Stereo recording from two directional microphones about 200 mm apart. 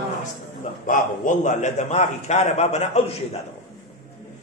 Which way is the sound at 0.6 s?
40° left (ahead or behind).